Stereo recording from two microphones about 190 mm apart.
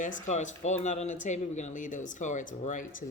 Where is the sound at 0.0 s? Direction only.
40° left (ahead or behind).